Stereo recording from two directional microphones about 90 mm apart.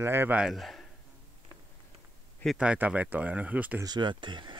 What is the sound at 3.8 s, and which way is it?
Speech, 55° right (ahead or behind).